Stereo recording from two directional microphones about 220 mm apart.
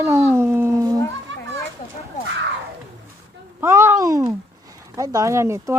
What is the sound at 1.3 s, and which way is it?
Children playing, 55° right (ahead or behind).